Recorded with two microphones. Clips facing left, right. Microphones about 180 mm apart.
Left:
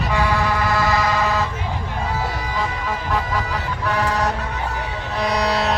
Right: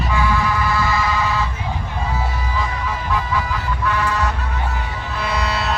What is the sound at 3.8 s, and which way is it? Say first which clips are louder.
Music: left 1 dB; 40° left (ahead or behind).